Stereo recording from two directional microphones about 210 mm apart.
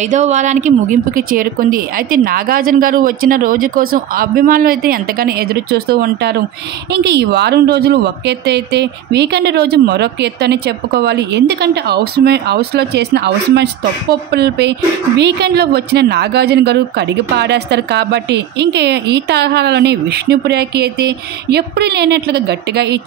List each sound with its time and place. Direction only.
0.0 s speech: 35° right (ahead or behind); by 22.9 s 50° right (ahead or behind)